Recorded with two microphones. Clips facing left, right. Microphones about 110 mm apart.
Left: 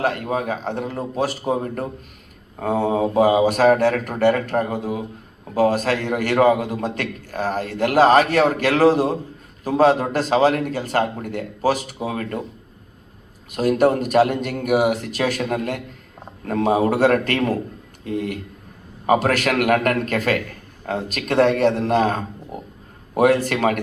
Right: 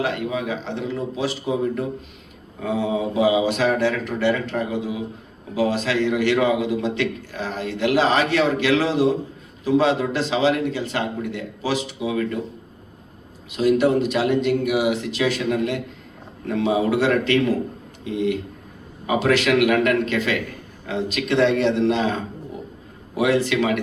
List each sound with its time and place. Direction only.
0.0 s a man's voice: 45° left (ahead or behind)
13.5 s a man's voice: 45° left (ahead or behind)